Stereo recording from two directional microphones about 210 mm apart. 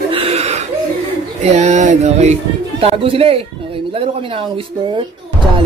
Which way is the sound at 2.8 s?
25° right (ahead or behind).